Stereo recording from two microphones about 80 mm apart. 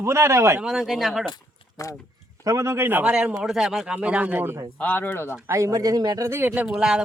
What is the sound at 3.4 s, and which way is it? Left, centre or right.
Speech, centre.